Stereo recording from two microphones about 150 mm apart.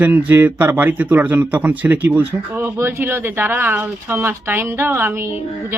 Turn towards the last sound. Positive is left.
turn(degrees=-15)  # may be behind; listen again after turning